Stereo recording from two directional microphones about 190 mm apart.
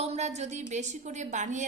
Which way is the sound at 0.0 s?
35° right (ahead or behind).